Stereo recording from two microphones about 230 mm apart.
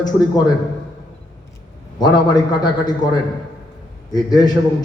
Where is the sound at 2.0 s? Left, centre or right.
Centre.